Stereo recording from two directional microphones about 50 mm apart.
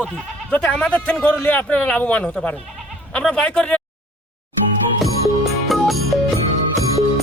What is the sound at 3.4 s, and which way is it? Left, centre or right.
Speech, left.